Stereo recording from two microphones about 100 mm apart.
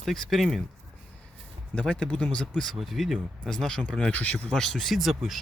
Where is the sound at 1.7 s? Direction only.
10° left (ahead or behind).